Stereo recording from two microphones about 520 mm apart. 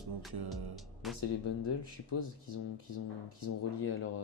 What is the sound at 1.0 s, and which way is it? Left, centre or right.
Speech, centre.